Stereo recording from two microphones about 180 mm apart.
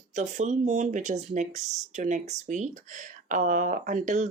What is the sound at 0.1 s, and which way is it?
Speech, 40° right (ahead or behind).